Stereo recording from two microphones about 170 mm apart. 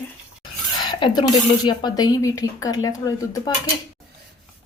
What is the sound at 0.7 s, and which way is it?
Speech, 25° left (ahead or behind).